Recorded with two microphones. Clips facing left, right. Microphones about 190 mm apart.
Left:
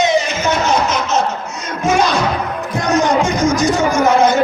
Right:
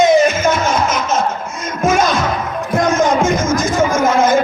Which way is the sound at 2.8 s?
90° right.